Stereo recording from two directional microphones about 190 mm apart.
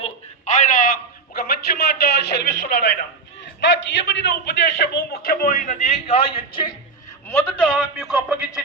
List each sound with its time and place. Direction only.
0.0 s a sound: 40° left (ahead or behind); by 4.0 s 70° left (ahead or behind)
4.4 s a man's voice: 55° left (ahead or behind); by 6.7 s 25° left (ahead or behind)
7.3 s a man's voice: 10° left (ahead or behind)